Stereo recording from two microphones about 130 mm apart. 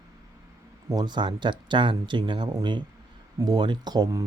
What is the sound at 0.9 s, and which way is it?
Speech, 30° right (ahead or behind).